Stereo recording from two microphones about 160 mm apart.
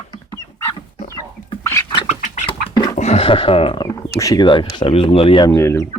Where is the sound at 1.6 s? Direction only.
15° left (ahead or behind).